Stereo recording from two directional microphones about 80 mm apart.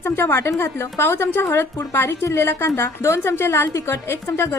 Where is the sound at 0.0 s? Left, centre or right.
Left.